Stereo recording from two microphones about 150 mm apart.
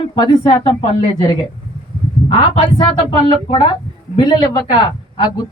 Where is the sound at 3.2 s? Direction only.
30° left (ahead or behind).